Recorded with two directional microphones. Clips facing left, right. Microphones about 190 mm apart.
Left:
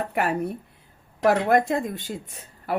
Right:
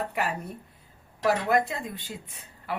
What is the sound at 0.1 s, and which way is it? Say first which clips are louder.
Speech: left 6 dB; 55° left (ahead or behind).